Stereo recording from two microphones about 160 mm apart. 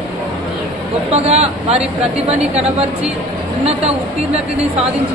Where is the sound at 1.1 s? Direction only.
40° right (ahead or behind).